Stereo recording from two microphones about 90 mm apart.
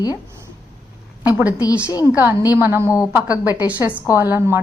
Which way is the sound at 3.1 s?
15° right (ahead or behind).